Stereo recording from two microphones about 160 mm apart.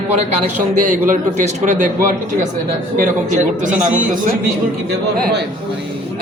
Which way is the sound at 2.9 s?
55° right (ahead or behind).